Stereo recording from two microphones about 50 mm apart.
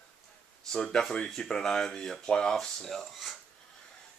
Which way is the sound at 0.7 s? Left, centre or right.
Centre.